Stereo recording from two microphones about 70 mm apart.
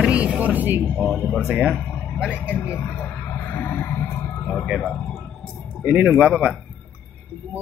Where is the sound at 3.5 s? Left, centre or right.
Left.